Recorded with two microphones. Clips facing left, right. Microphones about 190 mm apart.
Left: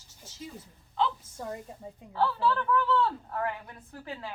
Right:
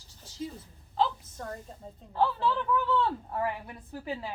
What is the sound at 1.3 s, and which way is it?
Speech, 10° left (ahead or behind).